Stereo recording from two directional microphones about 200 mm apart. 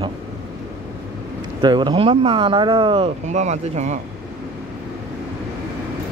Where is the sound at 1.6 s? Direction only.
25° right (ahead or behind).